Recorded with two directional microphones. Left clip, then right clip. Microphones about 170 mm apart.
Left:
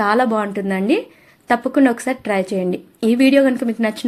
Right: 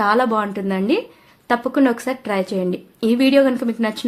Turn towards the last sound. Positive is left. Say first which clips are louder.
# left 1 dB
turn(degrees=10)  # may be behind; listen again after turning